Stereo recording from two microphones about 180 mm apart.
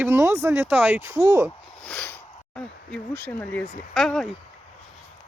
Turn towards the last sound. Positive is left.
turn(degrees=0)  # may be behind; listen again after turning